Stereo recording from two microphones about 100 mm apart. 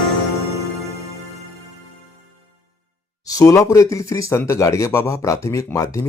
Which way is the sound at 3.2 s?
35° left (ahead or behind).